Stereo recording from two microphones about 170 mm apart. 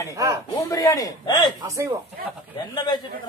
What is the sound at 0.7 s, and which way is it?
Speech, 20° left (ahead or behind).